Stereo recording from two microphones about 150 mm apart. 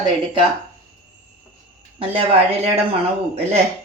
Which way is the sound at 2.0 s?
40° right (ahead or behind).